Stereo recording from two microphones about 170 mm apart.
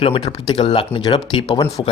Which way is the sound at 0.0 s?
30° left (ahead or behind).